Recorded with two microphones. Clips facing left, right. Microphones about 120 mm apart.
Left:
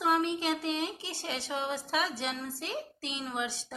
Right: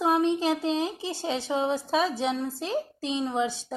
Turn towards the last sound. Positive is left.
turn(degrees=-30)  # may be behind; listen again after turning